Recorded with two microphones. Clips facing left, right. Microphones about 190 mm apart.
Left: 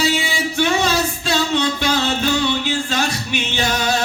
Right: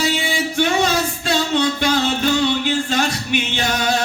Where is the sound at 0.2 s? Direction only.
50° right (ahead or behind).